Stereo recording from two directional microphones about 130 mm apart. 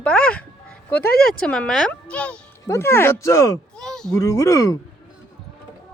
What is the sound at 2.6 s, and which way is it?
Speech, 20° left (ahead or behind).